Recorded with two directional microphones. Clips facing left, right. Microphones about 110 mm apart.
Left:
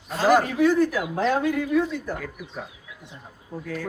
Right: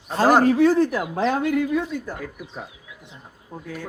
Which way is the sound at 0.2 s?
40° right (ahead or behind).